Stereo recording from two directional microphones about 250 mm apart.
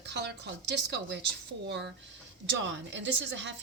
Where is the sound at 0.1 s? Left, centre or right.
Right.